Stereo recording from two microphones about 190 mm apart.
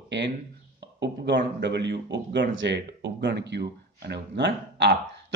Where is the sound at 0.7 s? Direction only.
65° right (ahead or behind).